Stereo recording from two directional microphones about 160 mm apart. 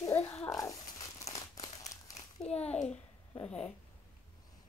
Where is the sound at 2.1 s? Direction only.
45° left (ahead or behind).